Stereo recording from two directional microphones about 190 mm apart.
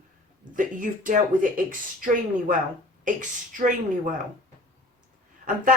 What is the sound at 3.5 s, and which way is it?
Speech, 45° right (ahead or behind).